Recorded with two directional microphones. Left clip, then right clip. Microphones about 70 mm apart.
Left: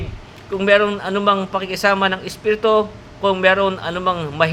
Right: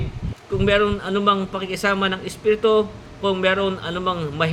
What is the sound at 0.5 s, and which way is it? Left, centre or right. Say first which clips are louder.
A man's voice: left 4 dB; right.